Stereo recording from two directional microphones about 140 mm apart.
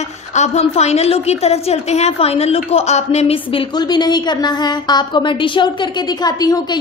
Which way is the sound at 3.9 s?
30° left (ahead or behind).